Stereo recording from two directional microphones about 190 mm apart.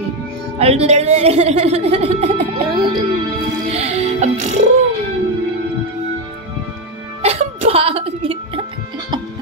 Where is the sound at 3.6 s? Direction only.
35° right (ahead or behind).